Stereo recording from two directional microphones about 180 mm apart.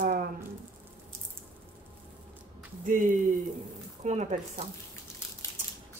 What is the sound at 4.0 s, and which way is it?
Speech, 40° right (ahead or behind).